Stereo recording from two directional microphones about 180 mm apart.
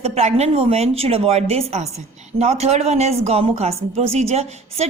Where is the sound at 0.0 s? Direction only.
35° right (ahead or behind).